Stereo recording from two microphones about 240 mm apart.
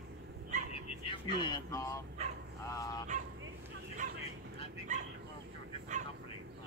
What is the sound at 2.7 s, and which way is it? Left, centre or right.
Fowl, centre.